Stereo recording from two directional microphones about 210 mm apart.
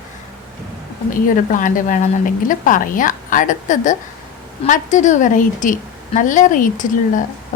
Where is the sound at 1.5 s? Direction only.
40° left (ahead or behind).